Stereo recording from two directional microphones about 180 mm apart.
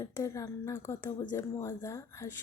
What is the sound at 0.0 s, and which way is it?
Speech, 15° left (ahead or behind).